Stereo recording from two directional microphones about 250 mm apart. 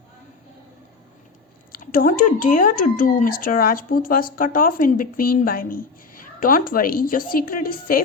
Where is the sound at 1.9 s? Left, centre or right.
Left.